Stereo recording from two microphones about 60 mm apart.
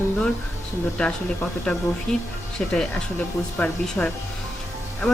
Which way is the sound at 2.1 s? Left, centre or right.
Centre.